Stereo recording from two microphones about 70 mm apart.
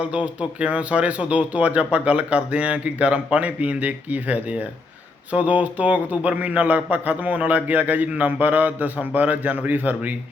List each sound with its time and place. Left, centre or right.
0.0 s speech: centre